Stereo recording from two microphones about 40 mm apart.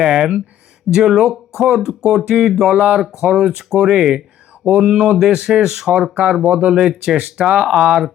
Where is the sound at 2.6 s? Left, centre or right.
Right.